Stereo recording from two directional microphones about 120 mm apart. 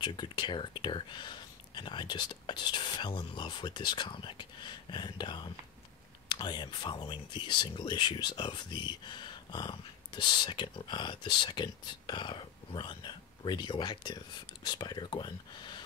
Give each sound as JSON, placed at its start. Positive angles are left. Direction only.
{"t": 0.0, "sound": "speech", "side_deg": 40}